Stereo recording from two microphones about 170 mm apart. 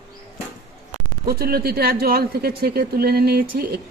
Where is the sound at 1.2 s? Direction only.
60° right (ahead or behind).